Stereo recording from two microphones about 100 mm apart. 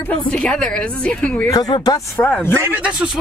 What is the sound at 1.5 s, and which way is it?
Speech, 40° left (ahead or behind).